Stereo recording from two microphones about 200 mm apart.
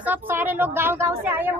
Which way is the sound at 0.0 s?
10° right (ahead or behind).